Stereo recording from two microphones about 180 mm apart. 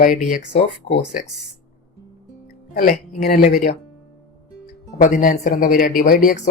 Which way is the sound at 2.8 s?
45° left (ahead or behind).